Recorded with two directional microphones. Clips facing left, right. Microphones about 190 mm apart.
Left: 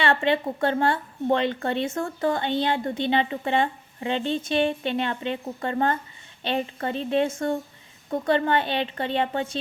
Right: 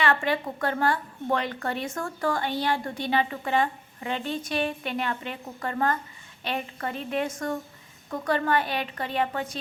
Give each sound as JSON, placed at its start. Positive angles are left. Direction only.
{"t": 0.0, "sound": "a woman's voice", "side_deg": 25}